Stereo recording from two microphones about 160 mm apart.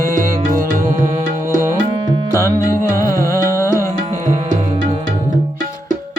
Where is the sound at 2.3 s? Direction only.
20° left (ahead or behind).